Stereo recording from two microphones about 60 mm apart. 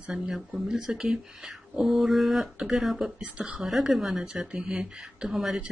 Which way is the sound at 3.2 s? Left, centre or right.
Centre.